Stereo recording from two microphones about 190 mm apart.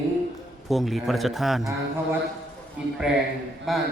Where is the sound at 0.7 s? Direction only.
Centre (ahead or behind).